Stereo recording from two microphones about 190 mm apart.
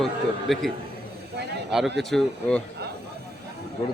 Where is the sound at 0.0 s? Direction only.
Centre (ahead or behind).